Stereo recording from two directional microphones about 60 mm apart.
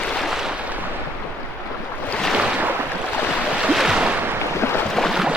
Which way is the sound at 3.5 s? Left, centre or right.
Centre.